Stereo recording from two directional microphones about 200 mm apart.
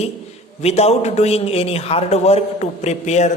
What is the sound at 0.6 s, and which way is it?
A man's voice, 30° left (ahead or behind).